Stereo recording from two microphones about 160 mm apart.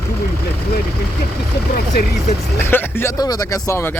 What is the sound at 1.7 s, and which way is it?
Speech, 80° left.